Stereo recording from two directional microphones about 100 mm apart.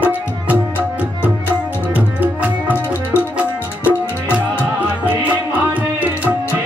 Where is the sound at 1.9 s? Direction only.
15° right (ahead or behind).